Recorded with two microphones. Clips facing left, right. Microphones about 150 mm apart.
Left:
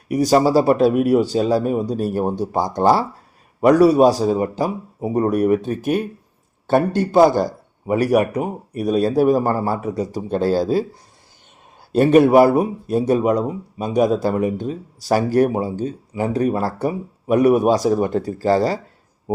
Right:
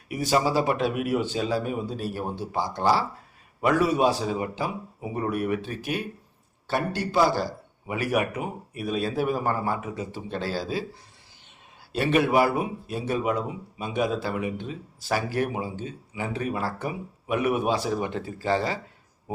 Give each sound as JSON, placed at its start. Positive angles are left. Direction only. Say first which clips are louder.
{"t": 0.1, "sound": "a man's voice", "louder": "left 9 dB", "side_deg": 40}
{"t": 11.9, "sound": "speech", "louder": "left 10 dB", "side_deg": 45}